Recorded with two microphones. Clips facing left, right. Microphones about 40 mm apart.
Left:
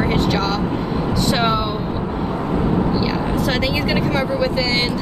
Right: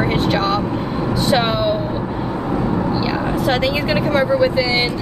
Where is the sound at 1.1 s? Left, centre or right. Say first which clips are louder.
Right 2 dB; centre.